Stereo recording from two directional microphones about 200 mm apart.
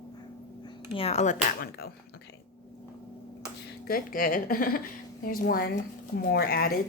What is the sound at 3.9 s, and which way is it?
Speech, 45° left (ahead or behind).